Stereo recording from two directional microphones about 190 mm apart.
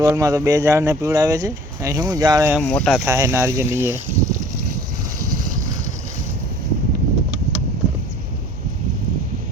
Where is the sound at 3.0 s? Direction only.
15° right (ahead or behind).